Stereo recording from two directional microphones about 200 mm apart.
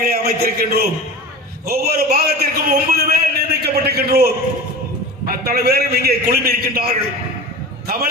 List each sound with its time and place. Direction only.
0.0 s a man's voice: 50° right (ahead or behind)